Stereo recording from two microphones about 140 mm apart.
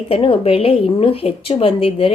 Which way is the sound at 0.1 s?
40° left (ahead or behind).